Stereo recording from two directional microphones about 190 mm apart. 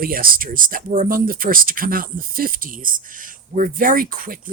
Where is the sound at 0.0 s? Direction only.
50° right (ahead or behind).